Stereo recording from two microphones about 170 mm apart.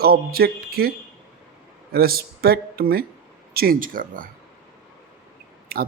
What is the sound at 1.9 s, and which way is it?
Speech, 60° right (ahead or behind).